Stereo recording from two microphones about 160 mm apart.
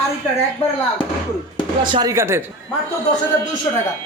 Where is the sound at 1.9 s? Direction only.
25° right (ahead or behind).